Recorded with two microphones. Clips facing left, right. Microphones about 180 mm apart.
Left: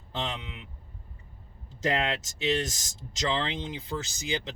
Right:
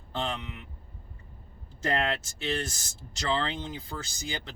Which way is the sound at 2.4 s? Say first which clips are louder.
Left 7 dB; 20° left (ahead or behind).